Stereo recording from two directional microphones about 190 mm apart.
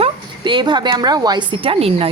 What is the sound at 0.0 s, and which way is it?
A woman's voice, 25° right (ahead or behind).